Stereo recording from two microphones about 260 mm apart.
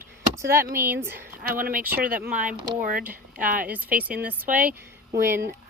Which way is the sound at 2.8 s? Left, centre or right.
Right.